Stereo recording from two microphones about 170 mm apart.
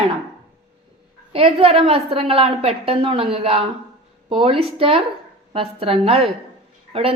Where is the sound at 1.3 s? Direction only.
35° right (ahead or behind).